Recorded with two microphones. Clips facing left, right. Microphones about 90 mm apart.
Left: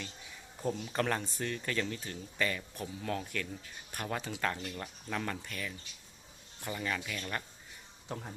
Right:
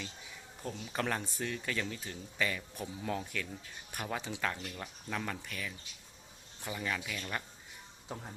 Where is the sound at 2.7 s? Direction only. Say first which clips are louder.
Even; 15° right (ahead or behind).